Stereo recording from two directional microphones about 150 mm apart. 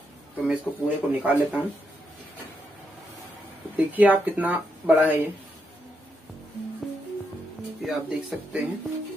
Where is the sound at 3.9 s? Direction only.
10° right (ahead or behind).